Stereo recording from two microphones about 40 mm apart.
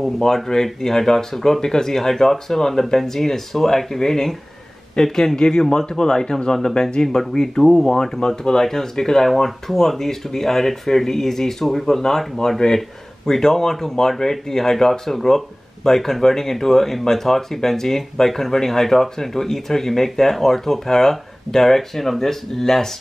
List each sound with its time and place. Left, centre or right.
0.0 s speech: centre